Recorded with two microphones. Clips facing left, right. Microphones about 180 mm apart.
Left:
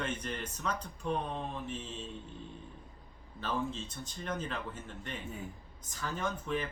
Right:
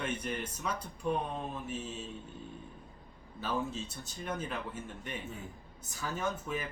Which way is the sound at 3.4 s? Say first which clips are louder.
Even; 10° right (ahead or behind).